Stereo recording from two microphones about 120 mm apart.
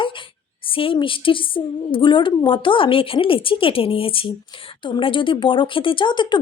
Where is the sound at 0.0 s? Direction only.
45° left (ahead or behind).